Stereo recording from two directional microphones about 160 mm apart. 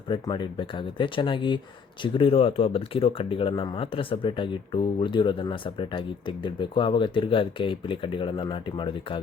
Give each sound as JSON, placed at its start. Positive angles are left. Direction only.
{"t": 0.1, "sound": "speech", "side_deg": 30}